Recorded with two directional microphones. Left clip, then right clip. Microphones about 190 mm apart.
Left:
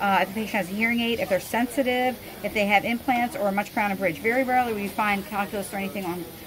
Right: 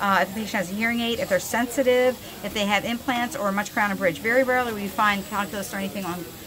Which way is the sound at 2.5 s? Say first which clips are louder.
Left 2 dB; 90° right.